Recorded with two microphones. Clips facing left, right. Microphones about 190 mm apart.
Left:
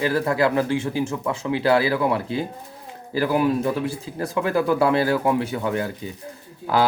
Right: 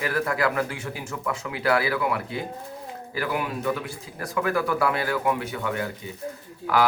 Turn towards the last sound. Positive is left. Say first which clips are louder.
# left 2 dB
turn(degrees=30)  # may be behind; listen again after turning